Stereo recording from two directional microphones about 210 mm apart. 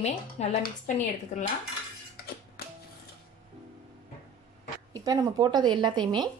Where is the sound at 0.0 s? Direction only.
30° left (ahead or behind).